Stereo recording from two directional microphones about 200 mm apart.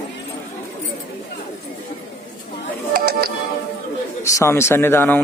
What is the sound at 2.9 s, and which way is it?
Music, 45° right (ahead or behind).